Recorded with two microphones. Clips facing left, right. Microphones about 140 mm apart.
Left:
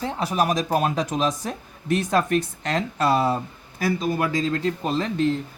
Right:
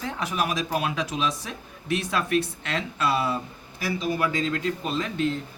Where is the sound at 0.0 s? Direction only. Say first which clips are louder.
Left 5 dB; 35° left (ahead or behind).